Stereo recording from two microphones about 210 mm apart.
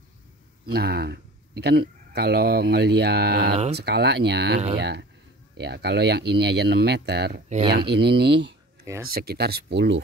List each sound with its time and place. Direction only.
0.7 s speech: 50° right (ahead or behind)
7.4 s speech: 30° right (ahead or behind)
7.7 s speech: 50° right (ahead or behind)